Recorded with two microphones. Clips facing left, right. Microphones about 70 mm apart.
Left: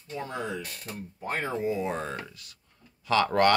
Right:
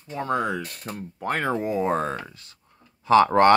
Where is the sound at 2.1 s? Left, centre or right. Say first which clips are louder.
Right 4 dB; right.